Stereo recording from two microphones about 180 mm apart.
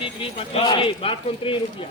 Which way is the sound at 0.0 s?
30° left (ahead or behind).